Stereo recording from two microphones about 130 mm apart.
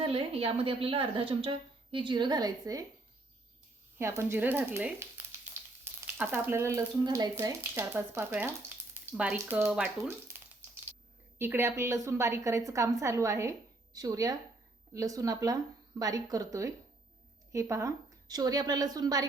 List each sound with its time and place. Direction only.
0.0 s speech: 50° right (ahead or behind); by 2.8 s 30° right (ahead or behind)
3.9 s speech: 20° right (ahead or behind)
5.8 s frying: 15° right (ahead or behind)
7.0 s speech: 30° right (ahead or behind)
7.4 s speech: 15° right (ahead or behind)
11.3 s a woman's voice: 20° right (ahead or behind)